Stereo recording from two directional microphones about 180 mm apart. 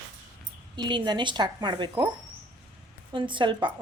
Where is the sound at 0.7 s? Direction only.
25° right (ahead or behind).